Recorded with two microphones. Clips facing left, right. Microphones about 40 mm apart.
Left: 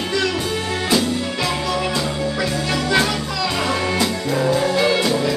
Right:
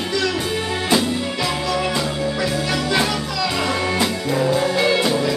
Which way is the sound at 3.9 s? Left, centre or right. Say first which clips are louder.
Even; centre.